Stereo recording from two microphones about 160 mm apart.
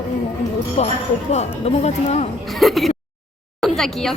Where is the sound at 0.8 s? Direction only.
40° left (ahead or behind).